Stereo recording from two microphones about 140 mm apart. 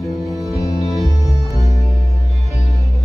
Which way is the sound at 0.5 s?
25° left (ahead or behind).